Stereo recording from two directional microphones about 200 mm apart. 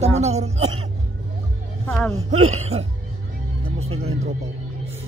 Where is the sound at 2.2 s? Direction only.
35° right (ahead or behind).